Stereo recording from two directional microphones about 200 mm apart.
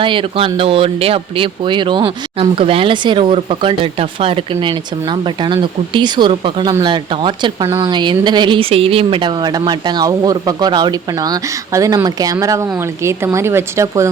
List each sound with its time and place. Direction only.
0.0 s speech: 25° right (ahead or behind)